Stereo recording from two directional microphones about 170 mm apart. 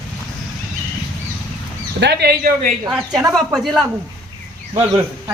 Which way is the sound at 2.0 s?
75° right (ahead or behind).